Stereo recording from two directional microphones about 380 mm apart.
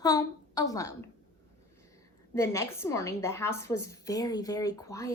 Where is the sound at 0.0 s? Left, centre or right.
Centre.